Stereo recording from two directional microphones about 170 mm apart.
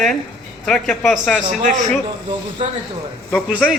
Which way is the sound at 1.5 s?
50° right (ahead or behind).